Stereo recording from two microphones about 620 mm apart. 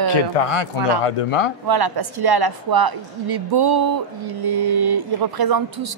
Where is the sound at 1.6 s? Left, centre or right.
Right.